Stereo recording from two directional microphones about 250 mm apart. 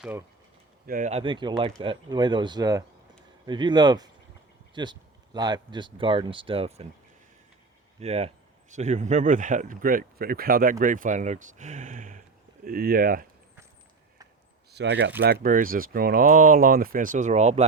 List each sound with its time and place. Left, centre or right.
0.0 s speech: centre
0.9 s speech: right
7.9 s speech: right
14.7 s speech: right
15.2 s speech: right